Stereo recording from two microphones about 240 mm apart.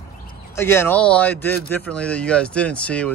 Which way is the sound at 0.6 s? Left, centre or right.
Centre.